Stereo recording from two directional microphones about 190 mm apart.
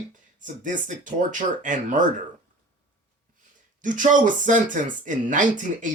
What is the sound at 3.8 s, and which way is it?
Speech, 40° right (ahead or behind).